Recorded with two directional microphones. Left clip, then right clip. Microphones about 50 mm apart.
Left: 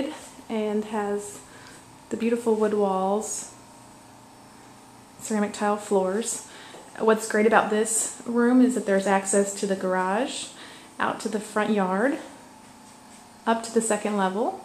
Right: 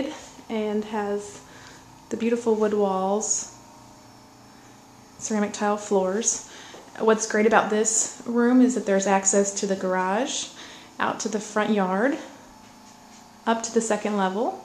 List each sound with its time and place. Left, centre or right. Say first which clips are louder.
0.0 s a sound: even; centre
0.6 s a woman's voice: even; centre
5.2 s speech: right 1 dB; centre
13.4 s speech: even; centre